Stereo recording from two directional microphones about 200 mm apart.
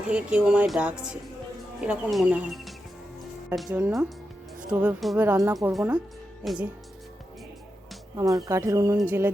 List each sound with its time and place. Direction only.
0.1 s speech: 5° right (ahead or behind)
8.1 s speech: 15° right (ahead or behind)